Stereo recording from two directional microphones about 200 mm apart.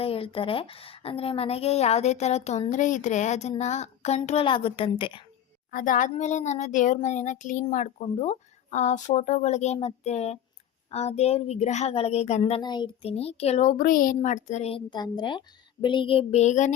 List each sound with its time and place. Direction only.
0.0 s a woman's voice: 30° left (ahead or behind)
5.7 s a woman's voice: 40° left (ahead or behind)